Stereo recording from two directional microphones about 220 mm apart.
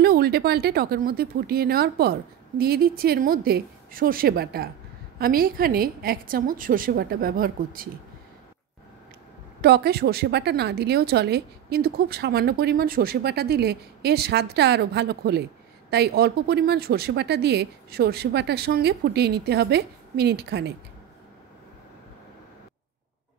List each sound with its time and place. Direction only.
0.0 s a woman's voice: 45° right (ahead or behind)
9.6 s a woman's voice: 45° right (ahead or behind)